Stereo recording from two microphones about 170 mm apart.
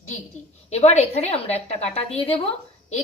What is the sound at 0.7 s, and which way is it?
A woman's voice, 40° left (ahead or behind).